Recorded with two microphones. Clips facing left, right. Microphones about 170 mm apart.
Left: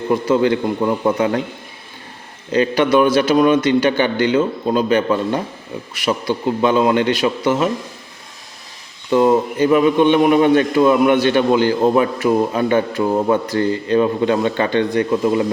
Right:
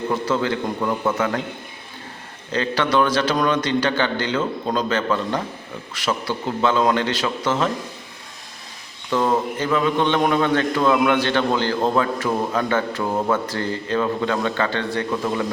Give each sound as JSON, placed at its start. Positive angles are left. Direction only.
{"t": 0.1, "sound": "a man's voice", "side_deg": 15}
{"t": 2.5, "sound": "a man's voice", "side_deg": 15}
{"t": 9.0, "sound": "a man's voice", "side_deg": 20}